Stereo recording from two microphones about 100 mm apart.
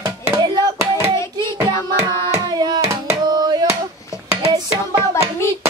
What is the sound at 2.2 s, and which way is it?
Hands, 40° right (ahead or behind).